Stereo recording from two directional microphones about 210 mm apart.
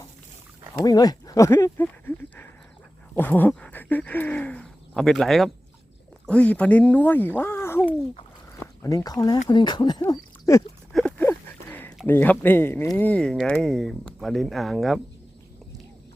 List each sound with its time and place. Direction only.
0.8 s speech: 20° left (ahead or behind)
7.8 s speech: 25° left (ahead or behind)
10.9 s a sound: 5° left (ahead or behind)
12.0 s speech: 10° left (ahead or behind)